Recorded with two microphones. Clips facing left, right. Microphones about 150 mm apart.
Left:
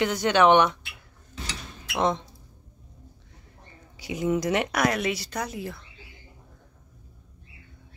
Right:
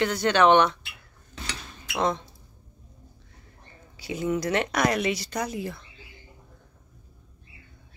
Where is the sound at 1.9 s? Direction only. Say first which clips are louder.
Left 1 dB; 20° left (ahead or behind).